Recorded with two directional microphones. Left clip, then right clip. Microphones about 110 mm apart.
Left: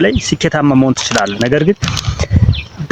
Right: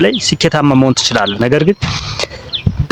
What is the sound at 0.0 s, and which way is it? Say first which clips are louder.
A man's voice: right 2 dB; 30° right (ahead or behind).